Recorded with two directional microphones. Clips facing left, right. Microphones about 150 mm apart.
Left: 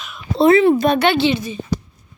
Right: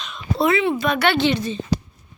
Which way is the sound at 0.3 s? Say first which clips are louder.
Left 8 dB; 35° left (ahead or behind).